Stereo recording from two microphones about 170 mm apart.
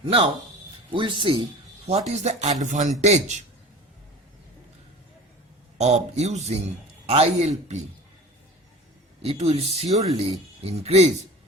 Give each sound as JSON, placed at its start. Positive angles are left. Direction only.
{"t": 0.0, "sound": "speech", "side_deg": -35}
{"t": 2.0, "sound": "speech", "side_deg": -40}
{"t": 5.7, "sound": "speech", "side_deg": -40}
{"t": 9.2, "sound": "speech", "side_deg": -35}